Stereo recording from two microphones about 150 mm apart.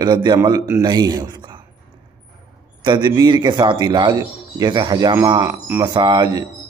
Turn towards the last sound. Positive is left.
turn(degrees=-30)  # may be behind; listen again after turning